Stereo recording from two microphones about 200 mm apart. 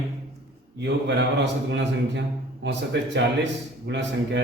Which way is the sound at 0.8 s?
60° right (ahead or behind).